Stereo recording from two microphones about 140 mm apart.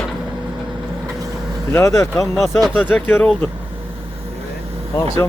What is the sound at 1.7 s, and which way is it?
Speech, 20° left (ahead or behind).